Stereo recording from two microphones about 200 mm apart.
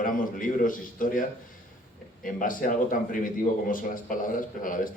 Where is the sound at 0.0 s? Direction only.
45° left (ahead or behind).